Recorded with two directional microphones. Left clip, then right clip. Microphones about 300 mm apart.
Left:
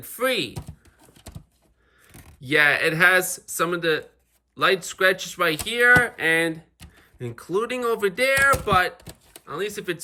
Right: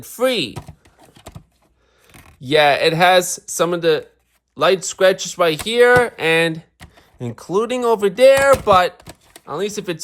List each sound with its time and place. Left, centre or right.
0.0 s typing: centre
2.4 s speech: centre
9.0 s a sound: centre
9.5 s speech: centre